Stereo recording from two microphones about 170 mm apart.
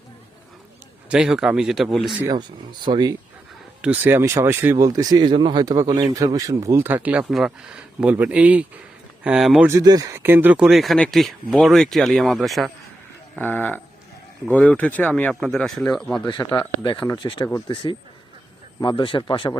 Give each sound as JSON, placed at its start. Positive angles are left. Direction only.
{"t": 1.1, "sound": "speech", "side_deg": -5}
{"t": 2.8, "sound": "speech", "side_deg": -25}
{"t": 3.8, "sound": "speech", "side_deg": -10}
{"t": 9.6, "sound": "speech", "side_deg": -20}
{"t": 13.4, "sound": "speech", "side_deg": 10}
{"t": 16.2, "sound": "speech", "side_deg": 25}
{"t": 18.8, "sound": "speech", "side_deg": 30}